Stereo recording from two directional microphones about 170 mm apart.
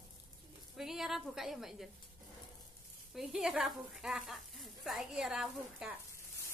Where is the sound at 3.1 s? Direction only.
Centre (ahead or behind).